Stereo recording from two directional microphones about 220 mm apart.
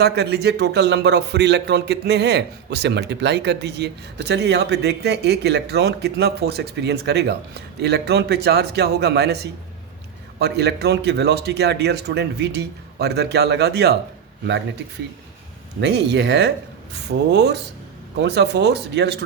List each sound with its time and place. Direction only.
0.0 s speech: 50° right (ahead or behind)
15.8 s speech: 50° right (ahead or behind)